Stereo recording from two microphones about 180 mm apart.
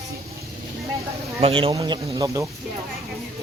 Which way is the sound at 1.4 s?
30° right (ahead or behind).